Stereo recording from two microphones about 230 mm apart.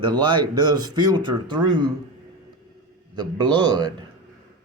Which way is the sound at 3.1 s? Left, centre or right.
Centre.